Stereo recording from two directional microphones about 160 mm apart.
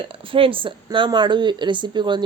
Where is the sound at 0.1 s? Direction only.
35° right (ahead or behind).